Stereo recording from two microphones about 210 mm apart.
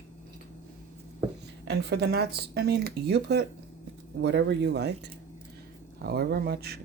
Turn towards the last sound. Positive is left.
turn(degrees=-50)  # may be behind; listen again after turning